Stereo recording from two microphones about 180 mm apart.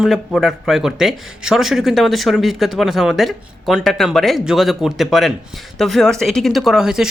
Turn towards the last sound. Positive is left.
turn(degrees=-5)  # may be behind; listen again after turning